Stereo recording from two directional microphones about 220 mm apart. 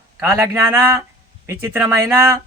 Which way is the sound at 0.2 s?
10° right (ahead or behind).